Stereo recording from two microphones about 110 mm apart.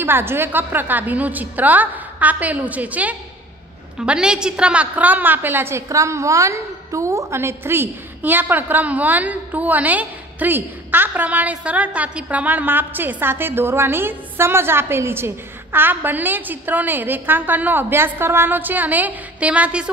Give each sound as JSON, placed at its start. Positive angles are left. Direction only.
{"t": 0.0, "sound": "a woman's voice", "side_deg": -20}